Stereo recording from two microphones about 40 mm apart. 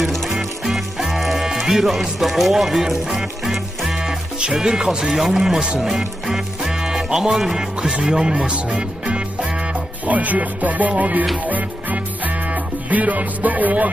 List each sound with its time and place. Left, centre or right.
0.0 s music: centre
1.9 s speech: centre
2.9 s music: centre
5.3 s speech: centre
8.4 s music: right